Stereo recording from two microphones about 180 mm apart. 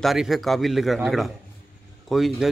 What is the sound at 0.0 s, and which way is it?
Speech, centre (ahead or behind).